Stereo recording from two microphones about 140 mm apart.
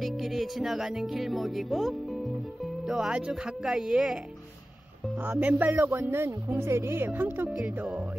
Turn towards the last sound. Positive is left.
turn(degrees=-10)  # may be behind; listen again after turning